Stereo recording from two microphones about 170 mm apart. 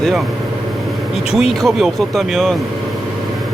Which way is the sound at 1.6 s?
Centre (ahead or behind).